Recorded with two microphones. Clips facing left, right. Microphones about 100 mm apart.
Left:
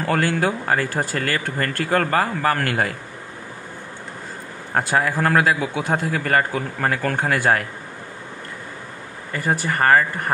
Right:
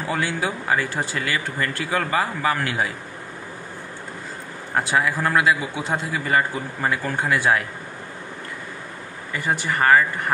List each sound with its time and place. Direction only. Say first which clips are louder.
0.0 s speech: left 4 dB; 60° left (ahead or behind)
4.7 s a man's voice: left 1 dB; 45° left (ahead or behind)
9.3 s speech: left 2 dB; 45° left (ahead or behind)